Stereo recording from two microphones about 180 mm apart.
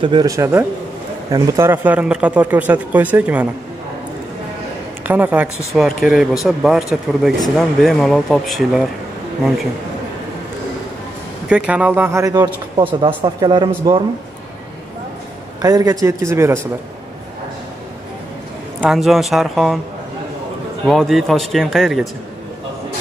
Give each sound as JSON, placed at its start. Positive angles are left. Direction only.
{"t": 0.0, "sound": "speech", "side_deg": -25}
{"t": 5.0, "sound": "speech", "side_deg": -10}
{"t": 11.4, "sound": "speech", "side_deg": -5}
{"t": 15.6, "sound": "speech", "side_deg": -20}
{"t": 18.8, "sound": "speech", "side_deg": 0}
{"t": 20.8, "sound": "speech", "side_deg": 0}